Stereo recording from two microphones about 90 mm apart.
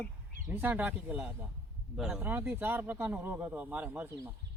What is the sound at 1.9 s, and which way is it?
Speech, 5° right (ahead or behind).